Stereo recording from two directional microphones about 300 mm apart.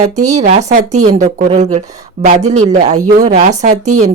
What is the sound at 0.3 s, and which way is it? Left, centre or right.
A woman's voice, right.